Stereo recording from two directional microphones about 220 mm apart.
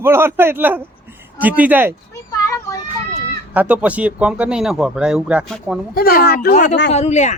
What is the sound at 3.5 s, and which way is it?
Speech, 5° right (ahead or behind).